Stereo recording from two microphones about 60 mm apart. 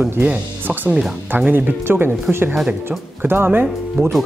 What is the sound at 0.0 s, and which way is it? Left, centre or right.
Speech, right.